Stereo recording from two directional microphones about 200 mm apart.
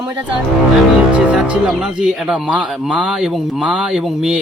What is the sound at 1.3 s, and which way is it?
Speech, centre (ahead or behind).